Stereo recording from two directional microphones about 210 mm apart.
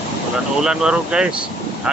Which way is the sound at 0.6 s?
5° right (ahead or behind).